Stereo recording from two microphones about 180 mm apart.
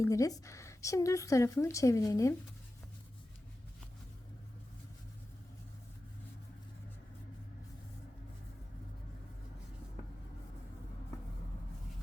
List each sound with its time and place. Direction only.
0.0 s speech: 20° left (ahead or behind)